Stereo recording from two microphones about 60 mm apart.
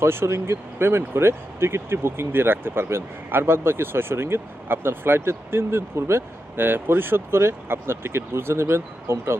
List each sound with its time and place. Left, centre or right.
0.0 s speech: right